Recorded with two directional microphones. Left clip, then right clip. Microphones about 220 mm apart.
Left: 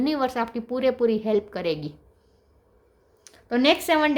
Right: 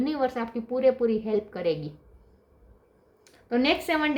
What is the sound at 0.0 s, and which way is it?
Speech, 45° left (ahead or behind).